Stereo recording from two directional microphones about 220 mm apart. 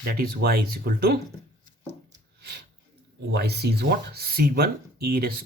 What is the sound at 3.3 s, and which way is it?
Speech, 45° right (ahead or behind).